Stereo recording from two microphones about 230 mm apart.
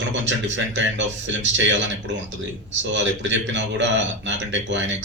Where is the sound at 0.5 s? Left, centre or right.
Right.